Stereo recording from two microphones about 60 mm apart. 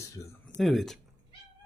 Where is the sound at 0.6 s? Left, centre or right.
Centre.